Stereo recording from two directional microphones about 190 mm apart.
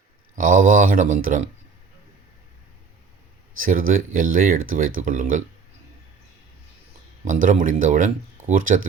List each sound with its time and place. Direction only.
0.3 s speech: 45° right (ahead or behind)
3.6 s speech: 45° right (ahead or behind)
7.3 s speech: 40° right (ahead or behind)